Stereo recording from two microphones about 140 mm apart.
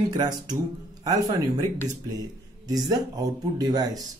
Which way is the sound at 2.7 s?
30° right (ahead or behind).